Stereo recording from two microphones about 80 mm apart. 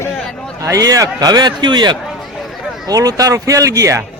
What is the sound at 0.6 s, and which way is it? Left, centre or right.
A man's voice, right.